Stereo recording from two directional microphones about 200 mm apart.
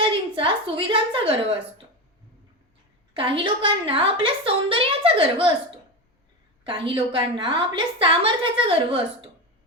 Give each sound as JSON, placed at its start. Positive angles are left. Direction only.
{"t": 0.0, "sound": "a woman's voice", "side_deg": -25}
{"t": 3.2, "sound": "a woman's voice", "side_deg": -25}
{"t": 6.7, "sound": "a woman's voice", "side_deg": -25}